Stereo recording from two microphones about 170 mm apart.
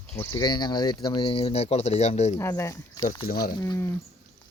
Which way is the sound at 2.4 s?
20° left (ahead or behind).